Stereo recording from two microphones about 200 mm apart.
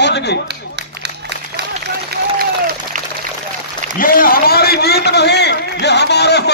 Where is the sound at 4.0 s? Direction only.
45° left (ahead or behind).